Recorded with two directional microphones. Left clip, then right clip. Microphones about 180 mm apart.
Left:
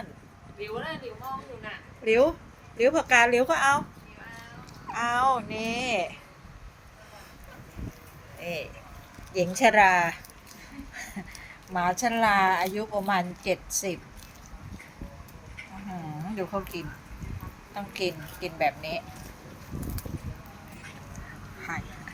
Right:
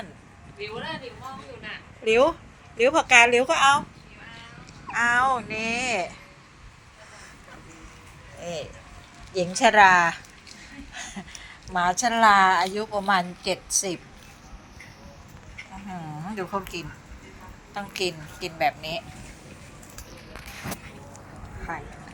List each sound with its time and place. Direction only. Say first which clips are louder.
0.6 s speech: right 1 dB; 55° left (ahead or behind)
2.0 s a woman's voice: right 2 dB; 5° right (ahead or behind)
4.9 s a woman's voice: right 3 dB; 5° left (ahead or behind)
8.4 s a woman's voice: right 1 dB; 5° left (ahead or behind)
17.7 s a woman's voice: right 2 dB; 5° left (ahead or behind)
21.7 s speech: right 2 dB; 45° left (ahead or behind)